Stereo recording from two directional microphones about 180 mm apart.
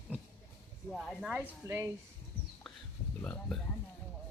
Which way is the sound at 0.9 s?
Centre (ahead or behind).